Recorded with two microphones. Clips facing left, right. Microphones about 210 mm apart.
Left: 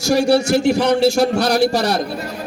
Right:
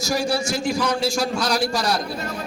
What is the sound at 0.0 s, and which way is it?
A man's voice, 65° left (ahead or behind).